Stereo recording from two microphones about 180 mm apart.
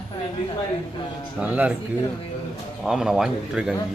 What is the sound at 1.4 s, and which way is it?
Speech, 5° right (ahead or behind).